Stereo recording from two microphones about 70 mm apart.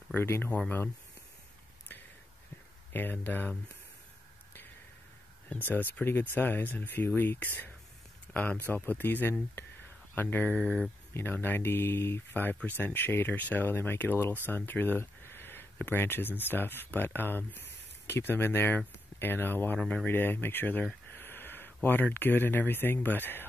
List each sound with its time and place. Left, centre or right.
0.1 s speech: left
2.9 s speech: left
5.5 s speech: left
10.5 s speech: centre
11.1 s speech: left